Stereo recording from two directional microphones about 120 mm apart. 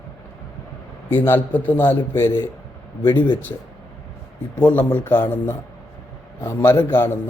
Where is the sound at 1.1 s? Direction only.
15° left (ahead or behind).